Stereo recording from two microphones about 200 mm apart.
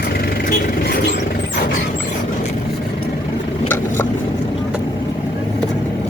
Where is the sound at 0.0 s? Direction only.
50° left (ahead or behind).